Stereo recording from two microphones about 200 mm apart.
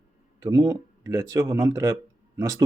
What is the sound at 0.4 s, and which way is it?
Speech, 20° right (ahead or behind).